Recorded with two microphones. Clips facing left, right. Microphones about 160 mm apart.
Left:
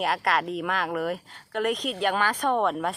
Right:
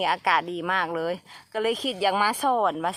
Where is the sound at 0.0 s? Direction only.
Centre (ahead or behind).